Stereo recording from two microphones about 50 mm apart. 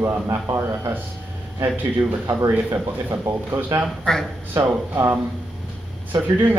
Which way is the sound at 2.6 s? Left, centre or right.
Right.